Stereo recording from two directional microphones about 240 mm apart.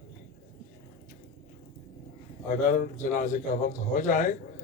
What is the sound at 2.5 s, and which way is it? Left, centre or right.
A man's voice, left.